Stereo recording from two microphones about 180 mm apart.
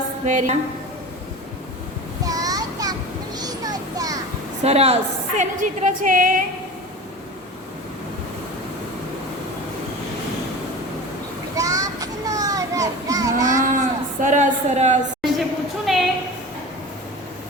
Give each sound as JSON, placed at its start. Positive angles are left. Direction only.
{"t": 0.3, "sound": "a woman's voice", "side_deg": -40}
{"t": 2.2, "sound": "child singing", "side_deg": -20}
{"t": 3.3, "sound": "a sound", "side_deg": -20}
{"t": 4.6, "sound": "a woman's voice", "side_deg": -35}
{"t": 11.5, "sound": "children playing", "side_deg": -20}
{"t": 13.5, "sound": "speech", "side_deg": -45}
{"t": 15.9, "sound": "a sound", "side_deg": 0}